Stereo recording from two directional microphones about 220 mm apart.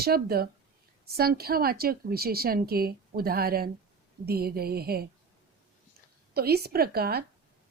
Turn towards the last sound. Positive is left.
turn(degrees=-45)  # may be behind; listen again after turning